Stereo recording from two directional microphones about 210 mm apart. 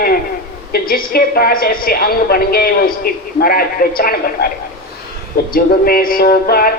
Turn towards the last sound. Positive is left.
turn(degrees=45)  # may be behind; listen again after turning